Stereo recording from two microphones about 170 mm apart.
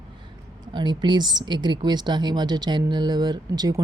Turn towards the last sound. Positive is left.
turn(degrees=-25)  # may be behind; listen again after turning